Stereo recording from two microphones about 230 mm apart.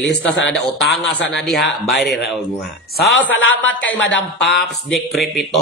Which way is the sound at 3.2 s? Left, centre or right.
Left.